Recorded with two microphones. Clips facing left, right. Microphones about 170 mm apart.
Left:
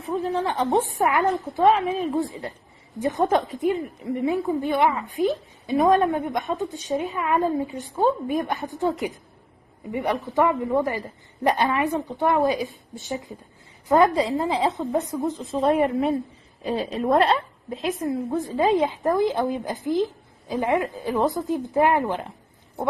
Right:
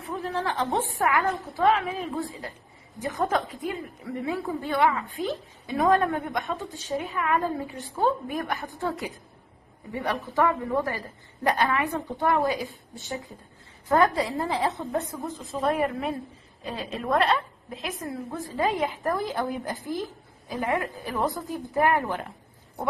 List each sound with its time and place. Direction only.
0.0 s a woman's voice: 20° left (ahead or behind)